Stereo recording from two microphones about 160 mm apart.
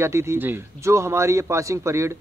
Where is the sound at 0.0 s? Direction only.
15° right (ahead or behind).